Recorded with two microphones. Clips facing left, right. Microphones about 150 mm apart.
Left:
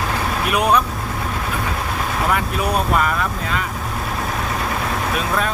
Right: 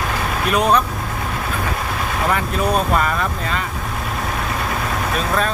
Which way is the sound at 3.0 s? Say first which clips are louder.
Even; 5° left (ahead or behind).